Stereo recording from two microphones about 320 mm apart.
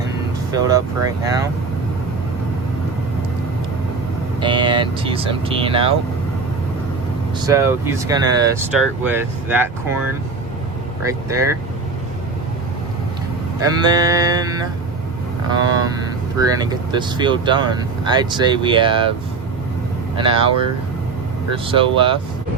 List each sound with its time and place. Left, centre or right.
0.5 s speech: centre
4.4 s speech: centre
7.4 s speech: centre
13.6 s speech: centre
20.1 s speech: centre
21.5 s speech: centre